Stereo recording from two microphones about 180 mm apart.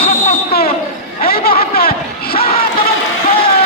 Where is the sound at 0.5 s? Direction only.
60° left (ahead or behind).